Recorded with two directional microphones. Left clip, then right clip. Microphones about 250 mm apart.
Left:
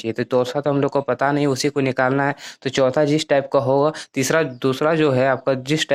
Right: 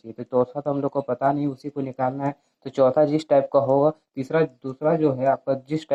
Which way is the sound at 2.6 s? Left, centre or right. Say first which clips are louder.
Left 1 dB; centre.